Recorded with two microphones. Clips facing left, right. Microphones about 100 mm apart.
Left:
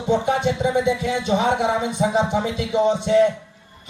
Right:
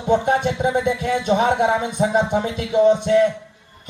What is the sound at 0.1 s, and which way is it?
Speech, 50° right (ahead or behind).